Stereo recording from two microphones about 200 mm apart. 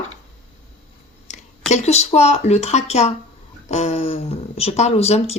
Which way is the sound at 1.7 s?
35° left (ahead or behind).